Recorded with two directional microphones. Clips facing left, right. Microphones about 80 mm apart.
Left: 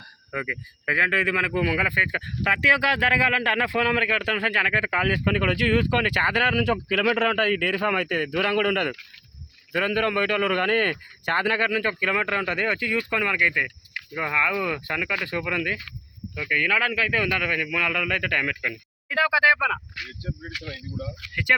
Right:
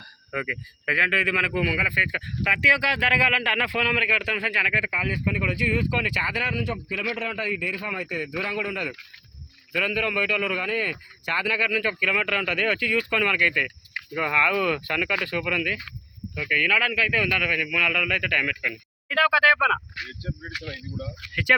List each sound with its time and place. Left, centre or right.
0.3 s a man's voice: left
3.1 s a man's voice: left
9.7 s a man's voice: left
19.1 s speech: centre